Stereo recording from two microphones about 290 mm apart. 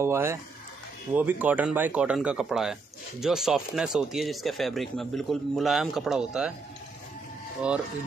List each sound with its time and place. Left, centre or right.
0.0 s speech: centre